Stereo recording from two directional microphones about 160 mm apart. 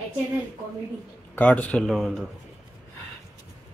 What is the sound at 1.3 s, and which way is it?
Speech, 10° left (ahead or behind).